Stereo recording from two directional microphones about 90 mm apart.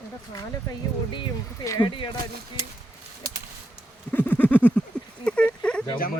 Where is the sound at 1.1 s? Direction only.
60° left (ahead or behind).